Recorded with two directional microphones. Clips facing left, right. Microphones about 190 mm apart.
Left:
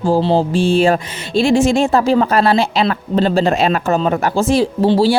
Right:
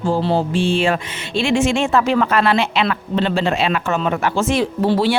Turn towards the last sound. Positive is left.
turn(degrees=30)  # may be behind; listen again after turning